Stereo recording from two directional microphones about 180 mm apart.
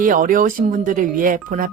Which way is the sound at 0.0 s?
50° right (ahead or behind).